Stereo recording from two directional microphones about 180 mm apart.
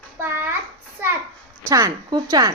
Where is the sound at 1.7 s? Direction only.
20° right (ahead or behind).